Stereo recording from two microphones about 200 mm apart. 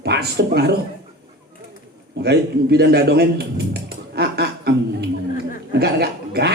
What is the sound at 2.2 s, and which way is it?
A man's voice, 55° right (ahead or behind).